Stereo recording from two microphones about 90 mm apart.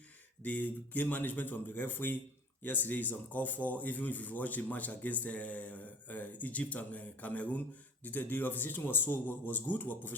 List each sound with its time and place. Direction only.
0.4 s speech: 20° left (ahead or behind)